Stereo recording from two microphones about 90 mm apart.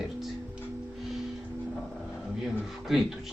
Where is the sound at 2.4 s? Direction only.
Centre (ahead or behind).